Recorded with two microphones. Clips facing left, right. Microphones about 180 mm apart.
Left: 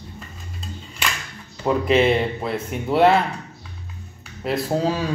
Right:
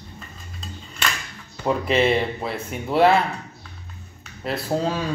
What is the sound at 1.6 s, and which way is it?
A man's voice, centre (ahead or behind).